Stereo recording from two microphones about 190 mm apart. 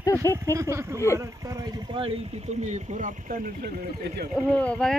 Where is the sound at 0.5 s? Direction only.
15° right (ahead or behind).